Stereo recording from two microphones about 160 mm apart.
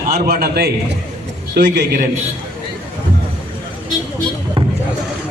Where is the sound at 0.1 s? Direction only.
70° right (ahead or behind).